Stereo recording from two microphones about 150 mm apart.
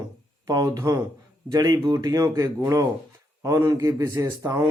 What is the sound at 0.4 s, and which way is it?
Speech, 25° right (ahead or behind).